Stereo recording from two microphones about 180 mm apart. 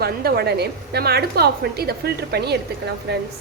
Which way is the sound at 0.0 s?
60° right (ahead or behind).